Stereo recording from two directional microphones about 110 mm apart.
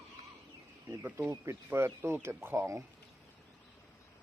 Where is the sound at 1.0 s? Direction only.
20° right (ahead or behind).